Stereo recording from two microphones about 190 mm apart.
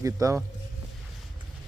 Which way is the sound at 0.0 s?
15° right (ahead or behind).